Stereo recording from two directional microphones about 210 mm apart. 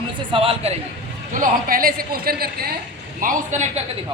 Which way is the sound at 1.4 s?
40° right (ahead or behind).